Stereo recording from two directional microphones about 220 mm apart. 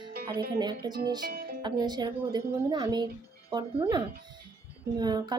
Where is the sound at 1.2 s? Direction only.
45° right (ahead or behind).